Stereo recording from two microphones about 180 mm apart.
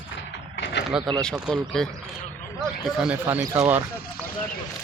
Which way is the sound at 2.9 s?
5° right (ahead or behind).